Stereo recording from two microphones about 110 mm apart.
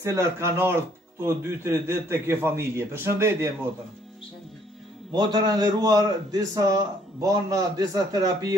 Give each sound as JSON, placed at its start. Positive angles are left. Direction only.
{"t": 0.0, "sound": "a man's voice", "side_deg": -25}
{"t": 5.1, "sound": "a man's voice", "side_deg": -40}